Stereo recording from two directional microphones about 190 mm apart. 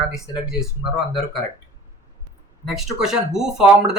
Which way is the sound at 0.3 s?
20° left (ahead or behind).